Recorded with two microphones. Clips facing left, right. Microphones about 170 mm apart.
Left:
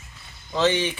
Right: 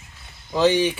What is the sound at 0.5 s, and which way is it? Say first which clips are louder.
Speech: right 4 dB; 10° right (ahead or behind).